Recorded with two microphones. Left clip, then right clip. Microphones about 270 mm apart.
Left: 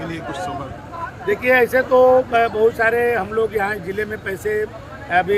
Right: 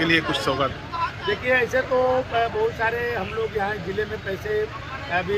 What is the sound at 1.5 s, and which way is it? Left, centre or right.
Speech, centre.